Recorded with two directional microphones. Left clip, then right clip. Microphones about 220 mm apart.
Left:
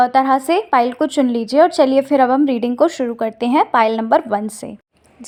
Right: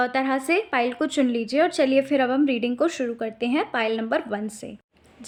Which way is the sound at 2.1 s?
Centre (ahead or behind).